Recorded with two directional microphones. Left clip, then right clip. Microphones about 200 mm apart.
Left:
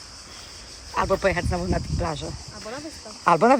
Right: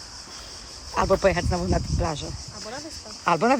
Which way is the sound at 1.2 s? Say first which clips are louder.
Right 1 dB; 10° right (ahead or behind).